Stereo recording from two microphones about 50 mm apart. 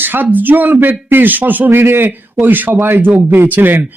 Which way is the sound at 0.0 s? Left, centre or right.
Right.